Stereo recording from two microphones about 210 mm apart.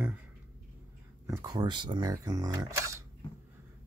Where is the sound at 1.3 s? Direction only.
15° right (ahead or behind).